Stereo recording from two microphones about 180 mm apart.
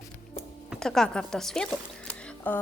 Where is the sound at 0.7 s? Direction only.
Centre (ahead or behind).